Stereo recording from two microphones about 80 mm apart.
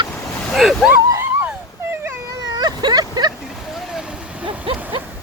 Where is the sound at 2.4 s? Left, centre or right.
Right.